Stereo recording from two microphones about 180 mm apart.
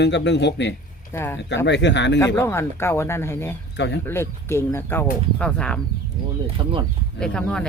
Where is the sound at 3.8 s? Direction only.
75° left (ahead or behind).